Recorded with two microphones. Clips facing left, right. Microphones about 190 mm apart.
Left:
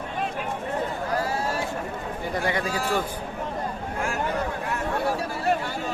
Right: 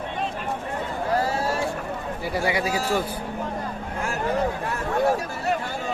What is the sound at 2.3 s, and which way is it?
Speech, 10° right (ahead or behind).